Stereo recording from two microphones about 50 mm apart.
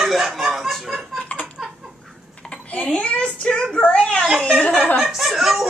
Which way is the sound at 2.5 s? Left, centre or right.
Left.